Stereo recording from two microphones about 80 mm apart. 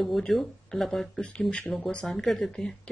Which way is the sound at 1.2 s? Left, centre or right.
Centre.